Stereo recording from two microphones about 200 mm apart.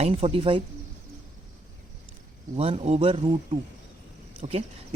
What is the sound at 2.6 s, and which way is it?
Speech, 30° right (ahead or behind).